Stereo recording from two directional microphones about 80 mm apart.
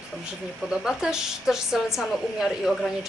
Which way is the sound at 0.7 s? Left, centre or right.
Centre.